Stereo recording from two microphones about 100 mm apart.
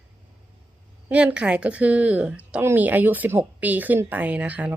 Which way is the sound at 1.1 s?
10° right (ahead or behind).